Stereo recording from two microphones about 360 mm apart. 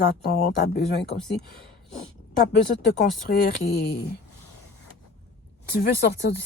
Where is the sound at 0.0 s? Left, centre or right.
Left.